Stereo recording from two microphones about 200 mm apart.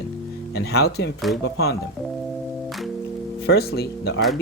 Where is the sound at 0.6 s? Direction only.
55° left (ahead or behind).